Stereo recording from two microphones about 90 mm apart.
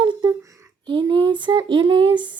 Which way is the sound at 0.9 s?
60° right (ahead or behind).